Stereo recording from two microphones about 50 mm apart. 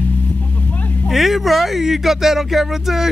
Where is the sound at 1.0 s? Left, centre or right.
Centre.